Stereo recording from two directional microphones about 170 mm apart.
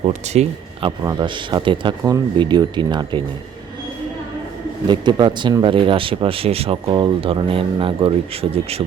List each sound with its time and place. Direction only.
0.1 s speech: 40° right (ahead or behind)
0.9 s speech: 25° right (ahead or behind)
4.9 s speech: 25° right (ahead or behind)